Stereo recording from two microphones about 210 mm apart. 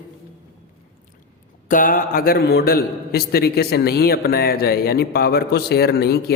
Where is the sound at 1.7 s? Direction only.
40° left (ahead or behind).